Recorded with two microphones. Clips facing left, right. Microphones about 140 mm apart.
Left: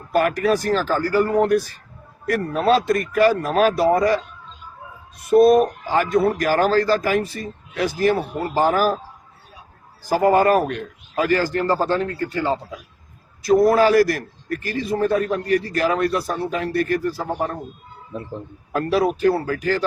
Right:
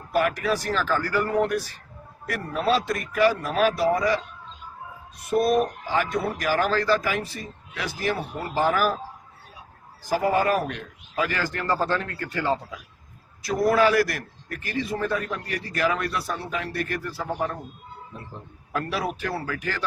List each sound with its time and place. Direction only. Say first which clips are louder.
0.1 s a man's voice: left 5 dB; 45° left (ahead or behind)
5.4 s a man's voice: left 8 dB; 40° left (ahead or behind)
10.1 s a man's voice: left 6 dB; 45° left (ahead or behind); by 12.5 s 25° left (ahead or behind)
13.4 s a man's voice: left 6 dB; 40° left (ahead or behind)
18.7 s a man's voice: left 8 dB; 35° left (ahead or behind)